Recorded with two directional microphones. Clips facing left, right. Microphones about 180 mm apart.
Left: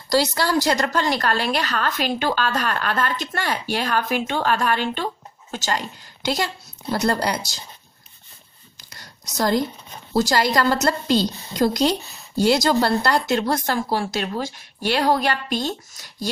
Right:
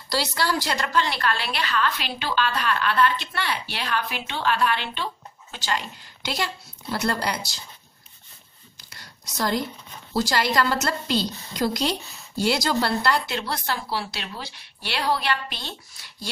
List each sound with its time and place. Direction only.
0.1 s a woman's voice: 45° left (ahead or behind)
8.9 s a sound: 40° left (ahead or behind)
10.1 s a woman's voice: 45° left (ahead or behind)